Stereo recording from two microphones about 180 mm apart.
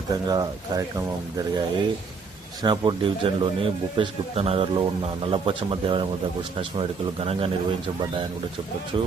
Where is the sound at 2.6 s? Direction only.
25° right (ahead or behind).